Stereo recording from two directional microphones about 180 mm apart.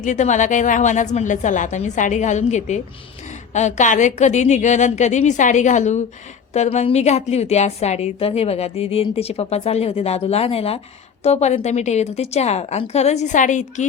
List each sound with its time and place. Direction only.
0.0 s a woman's voice: 40° left (ahead or behind)